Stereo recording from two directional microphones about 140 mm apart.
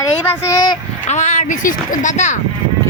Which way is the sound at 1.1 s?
55° left (ahead or behind).